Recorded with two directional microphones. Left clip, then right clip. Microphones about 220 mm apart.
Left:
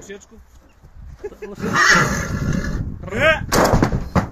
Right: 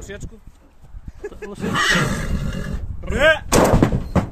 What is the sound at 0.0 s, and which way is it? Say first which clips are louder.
Speech: right 1 dB; 45° right (ahead or behind).